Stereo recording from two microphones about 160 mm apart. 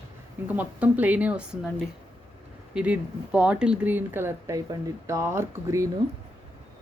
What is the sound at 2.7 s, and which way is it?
A woman's voice, 10° right (ahead or behind).